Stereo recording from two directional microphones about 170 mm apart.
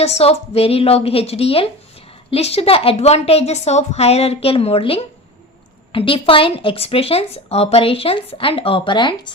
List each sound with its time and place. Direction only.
0.0 s speech: 35° left (ahead or behind)